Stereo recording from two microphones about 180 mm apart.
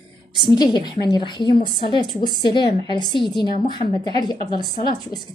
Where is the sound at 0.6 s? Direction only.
25° left (ahead or behind).